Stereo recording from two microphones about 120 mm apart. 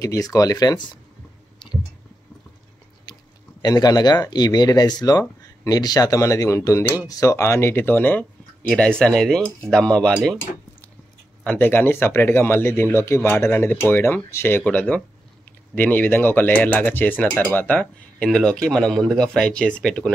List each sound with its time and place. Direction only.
0.0 s speech: 25° left (ahead or behind)
3.1 s a sound: 35° left (ahead or behind)
3.6 s speech: 35° left (ahead or behind); by 10.4 s 5° left (ahead or behind)
11.4 s speech: 15° left (ahead or behind)